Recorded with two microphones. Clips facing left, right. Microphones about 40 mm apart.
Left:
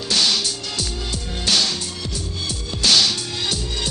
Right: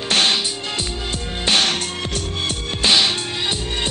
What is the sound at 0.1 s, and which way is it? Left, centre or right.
Music, right.